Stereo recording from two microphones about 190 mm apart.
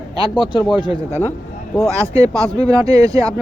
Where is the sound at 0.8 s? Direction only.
25° right (ahead or behind).